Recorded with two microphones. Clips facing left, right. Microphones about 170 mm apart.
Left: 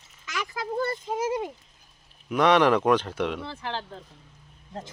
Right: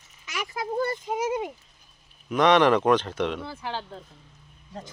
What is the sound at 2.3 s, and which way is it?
Speech, 5° left (ahead or behind).